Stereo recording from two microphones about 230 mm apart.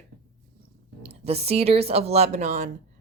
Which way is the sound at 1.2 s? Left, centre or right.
Right.